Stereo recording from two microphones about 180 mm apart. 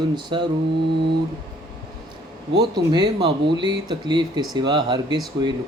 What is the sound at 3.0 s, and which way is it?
Speech, 70° right (ahead or behind).